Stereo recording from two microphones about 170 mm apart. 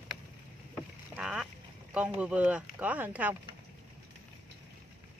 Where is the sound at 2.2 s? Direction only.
10° right (ahead or behind).